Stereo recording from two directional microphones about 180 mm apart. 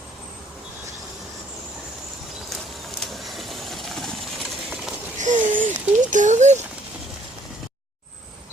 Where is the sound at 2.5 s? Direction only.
Centre (ahead or behind).